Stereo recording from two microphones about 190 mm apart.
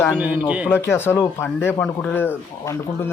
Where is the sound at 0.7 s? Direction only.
10° left (ahead or behind).